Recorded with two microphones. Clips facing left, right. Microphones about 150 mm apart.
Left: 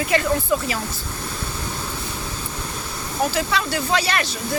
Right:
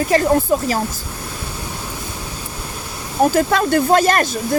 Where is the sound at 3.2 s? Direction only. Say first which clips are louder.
Right 7 dB; 50° right (ahead or behind).